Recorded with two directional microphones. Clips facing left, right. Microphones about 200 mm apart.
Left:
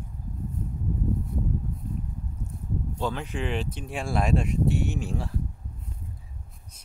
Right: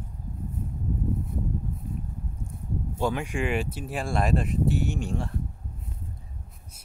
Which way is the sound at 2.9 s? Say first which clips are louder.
Right 4 dB; 10° right (ahead or behind).